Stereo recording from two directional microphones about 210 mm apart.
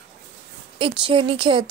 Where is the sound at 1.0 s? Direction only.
25° right (ahead or behind).